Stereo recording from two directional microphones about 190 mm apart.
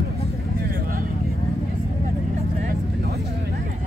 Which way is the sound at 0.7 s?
50° right (ahead or behind).